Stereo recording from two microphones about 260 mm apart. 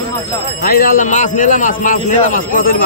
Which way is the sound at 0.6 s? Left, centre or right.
Left.